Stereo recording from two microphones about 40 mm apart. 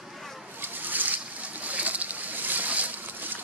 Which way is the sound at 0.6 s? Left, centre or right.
Right.